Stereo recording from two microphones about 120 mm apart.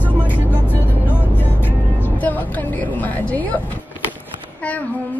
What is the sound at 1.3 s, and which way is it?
Music, 15° left (ahead or behind).